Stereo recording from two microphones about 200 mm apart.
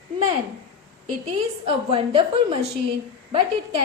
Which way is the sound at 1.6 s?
30° right (ahead or behind).